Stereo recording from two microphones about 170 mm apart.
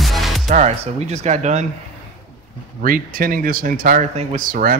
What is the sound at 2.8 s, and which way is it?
Speech, 55° right (ahead or behind).